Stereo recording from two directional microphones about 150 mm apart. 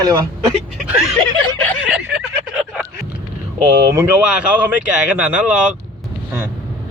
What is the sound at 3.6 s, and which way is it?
Speech, 15° right (ahead or behind).